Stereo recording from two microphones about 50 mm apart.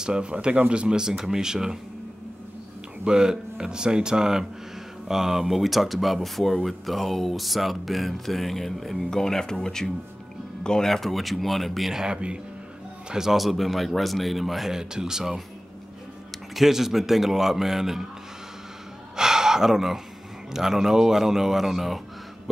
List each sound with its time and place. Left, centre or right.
0.0 s speech: centre
3.1 s speech: centre
11.9 s speech: centre
13.1 s speech: centre
16.5 s speech: centre
19.1 s a sound: centre
20.5 s speech: centre